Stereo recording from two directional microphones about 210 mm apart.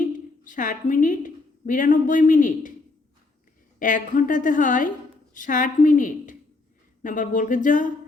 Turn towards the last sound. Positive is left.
turn(degrees=40)  # may be behind; listen again after turning